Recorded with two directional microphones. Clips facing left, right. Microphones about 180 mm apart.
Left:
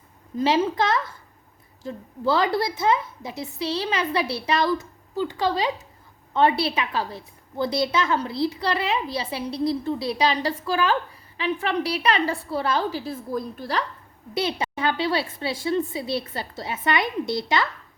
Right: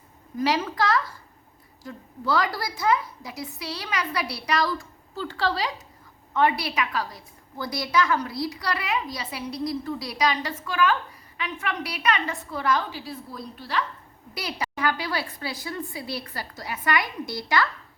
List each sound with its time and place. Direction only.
0.3 s a woman's voice: 25° left (ahead or behind); by 13.8 s 45° left (ahead or behind)
14.3 s a woman's voice: 25° left (ahead or behind)